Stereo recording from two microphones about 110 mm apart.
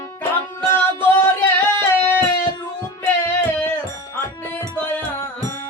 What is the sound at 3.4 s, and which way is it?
Music, 20° left (ahead or behind).